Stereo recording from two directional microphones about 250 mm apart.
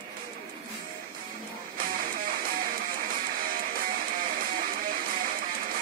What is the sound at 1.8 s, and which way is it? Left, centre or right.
Music, right.